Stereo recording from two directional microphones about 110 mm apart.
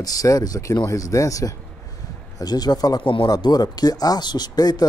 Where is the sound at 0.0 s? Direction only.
35° left (ahead or behind).